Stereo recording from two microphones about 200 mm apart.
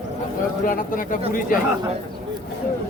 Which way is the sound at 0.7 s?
45° left (ahead or behind).